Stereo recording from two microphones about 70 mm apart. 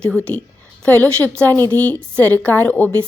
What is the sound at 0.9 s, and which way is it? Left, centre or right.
A woman's voice, left.